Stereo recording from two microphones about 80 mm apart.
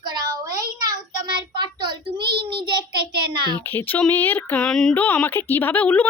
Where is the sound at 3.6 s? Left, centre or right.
Left.